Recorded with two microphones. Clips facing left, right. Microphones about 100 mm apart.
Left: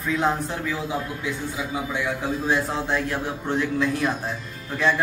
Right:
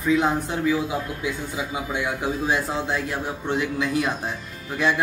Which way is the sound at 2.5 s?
Centre (ahead or behind).